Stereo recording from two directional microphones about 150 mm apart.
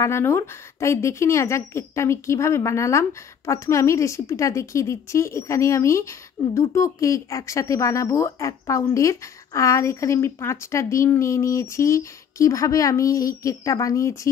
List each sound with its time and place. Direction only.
0.0 s speech: 15° left (ahead or behind)